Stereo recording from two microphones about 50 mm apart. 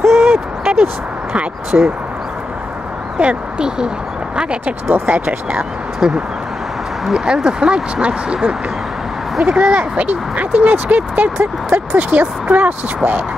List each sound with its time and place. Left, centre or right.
0.0 s a sound: centre
1.7 s speech: right
3.2 s speech: right
5.6 s speech: centre; by 13.2 s right